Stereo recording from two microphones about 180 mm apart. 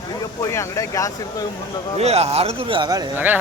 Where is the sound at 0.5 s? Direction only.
15° left (ahead or behind).